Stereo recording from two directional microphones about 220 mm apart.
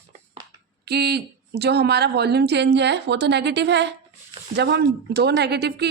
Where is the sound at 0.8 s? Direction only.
50° right (ahead or behind).